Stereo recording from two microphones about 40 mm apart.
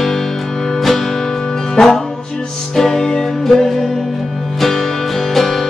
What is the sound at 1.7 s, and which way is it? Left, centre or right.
Music, centre.